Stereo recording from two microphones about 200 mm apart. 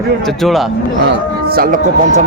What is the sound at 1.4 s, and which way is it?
Speech, 50° right (ahead or behind).